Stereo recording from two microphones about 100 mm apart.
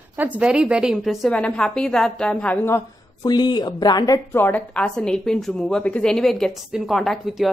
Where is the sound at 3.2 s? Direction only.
45° left (ahead or behind).